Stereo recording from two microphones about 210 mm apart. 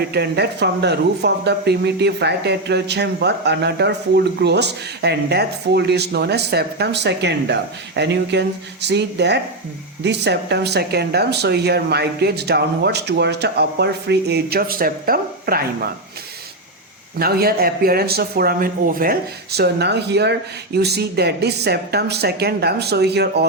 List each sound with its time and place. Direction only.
0.1 s speech: 50° right (ahead or behind)
17.2 s speech: 45° right (ahead or behind)